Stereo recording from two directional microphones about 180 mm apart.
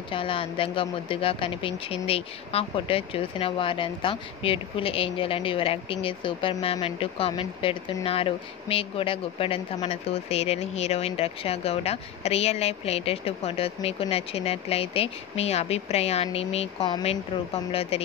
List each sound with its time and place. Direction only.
0.1 s speech: 30° left (ahead or behind)